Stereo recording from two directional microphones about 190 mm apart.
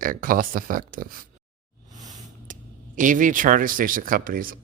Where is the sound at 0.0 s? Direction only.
45° right (ahead or behind).